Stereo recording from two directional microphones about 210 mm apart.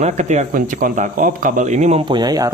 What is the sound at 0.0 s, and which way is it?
Speech, 35° right (ahead or behind).